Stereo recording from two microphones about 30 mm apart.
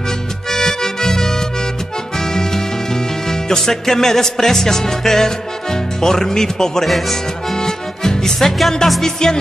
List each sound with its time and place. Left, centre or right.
0.5 s music: centre
6.9 s speech: centre
7.5 s accordion: centre
8.4 s music: centre
9.0 s music: left